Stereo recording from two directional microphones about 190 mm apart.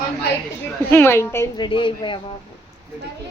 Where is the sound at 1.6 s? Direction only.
25° left (ahead or behind).